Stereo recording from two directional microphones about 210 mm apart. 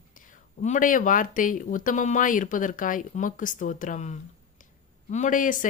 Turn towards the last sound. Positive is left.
turn(degrees=40)  # may be behind; listen again after turning